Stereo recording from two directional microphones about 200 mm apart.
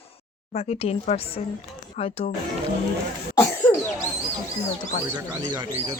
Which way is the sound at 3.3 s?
10° left (ahead or behind).